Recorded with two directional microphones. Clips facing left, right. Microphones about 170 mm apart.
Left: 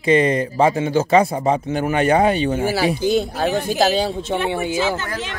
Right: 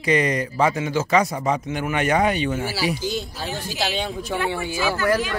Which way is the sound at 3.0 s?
60° left (ahead or behind).